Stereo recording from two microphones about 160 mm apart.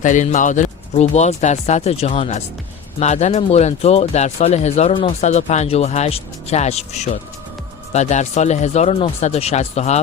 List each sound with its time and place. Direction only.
0.0 s speech: 50° left (ahead or behind)